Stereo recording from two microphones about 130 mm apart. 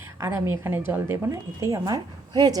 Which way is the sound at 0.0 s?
20° right (ahead or behind).